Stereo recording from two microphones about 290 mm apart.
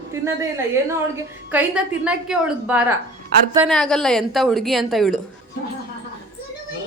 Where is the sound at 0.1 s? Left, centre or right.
Centre.